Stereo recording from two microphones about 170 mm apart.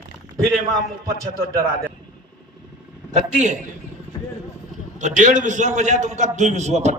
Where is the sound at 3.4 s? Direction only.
45° right (ahead or behind).